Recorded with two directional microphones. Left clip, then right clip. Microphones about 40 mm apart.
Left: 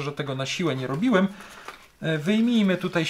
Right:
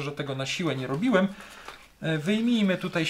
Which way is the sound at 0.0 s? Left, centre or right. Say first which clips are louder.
Left 2 dB; centre.